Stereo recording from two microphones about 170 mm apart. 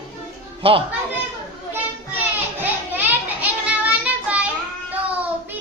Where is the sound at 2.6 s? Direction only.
10° right (ahead or behind).